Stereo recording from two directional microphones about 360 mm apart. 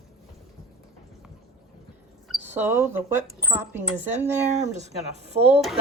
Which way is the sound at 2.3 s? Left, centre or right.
Centre.